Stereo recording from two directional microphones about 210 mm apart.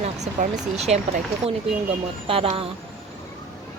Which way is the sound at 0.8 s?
30° right (ahead or behind).